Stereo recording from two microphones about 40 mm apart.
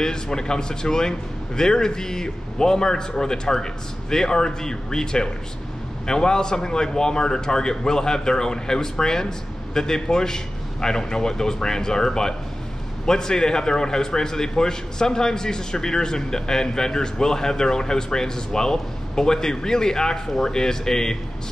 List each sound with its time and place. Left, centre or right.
0.0 s a man's voice: centre